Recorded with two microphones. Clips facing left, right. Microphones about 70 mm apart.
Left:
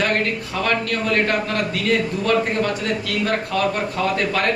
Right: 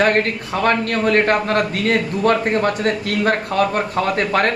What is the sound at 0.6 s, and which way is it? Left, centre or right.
A man's voice, right.